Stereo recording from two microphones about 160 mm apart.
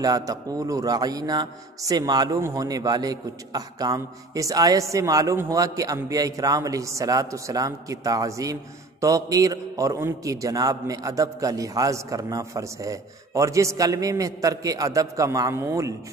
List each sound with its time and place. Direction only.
0.0 s a man's voice: 25° right (ahead or behind)